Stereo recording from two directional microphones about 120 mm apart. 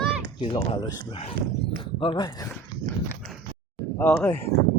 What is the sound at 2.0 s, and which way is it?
Speech, 35° left (ahead or behind).